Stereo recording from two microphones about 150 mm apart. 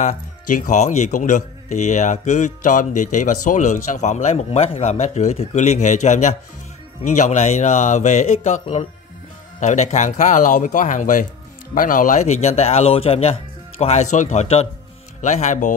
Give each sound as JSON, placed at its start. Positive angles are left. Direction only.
{"t": 0.0, "sound": "speech", "side_deg": 60}